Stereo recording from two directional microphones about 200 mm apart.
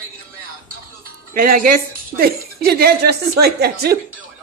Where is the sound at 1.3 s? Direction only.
45° right (ahead or behind).